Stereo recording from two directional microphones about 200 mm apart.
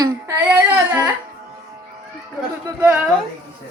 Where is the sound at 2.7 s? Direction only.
15° right (ahead or behind).